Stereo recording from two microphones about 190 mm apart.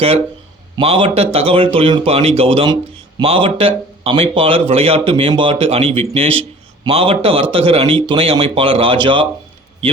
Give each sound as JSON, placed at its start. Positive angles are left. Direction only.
{"t": 0.8, "sound": "speech", "side_deg": -30}